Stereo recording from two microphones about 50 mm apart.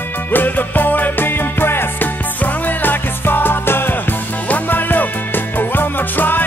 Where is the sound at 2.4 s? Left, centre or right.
Left.